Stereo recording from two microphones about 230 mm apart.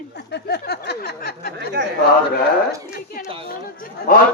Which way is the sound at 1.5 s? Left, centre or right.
Right.